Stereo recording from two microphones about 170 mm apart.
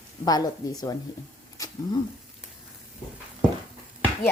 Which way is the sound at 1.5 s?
20° left (ahead or behind).